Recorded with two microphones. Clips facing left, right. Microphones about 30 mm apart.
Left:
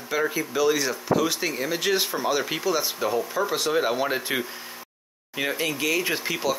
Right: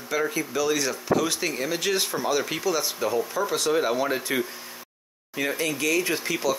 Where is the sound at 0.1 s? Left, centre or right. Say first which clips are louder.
Left 1 dB; centre.